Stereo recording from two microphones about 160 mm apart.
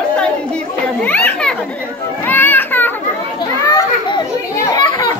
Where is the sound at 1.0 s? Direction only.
10° left (ahead or behind).